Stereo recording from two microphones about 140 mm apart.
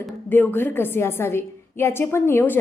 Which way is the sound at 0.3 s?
15° left (ahead or behind).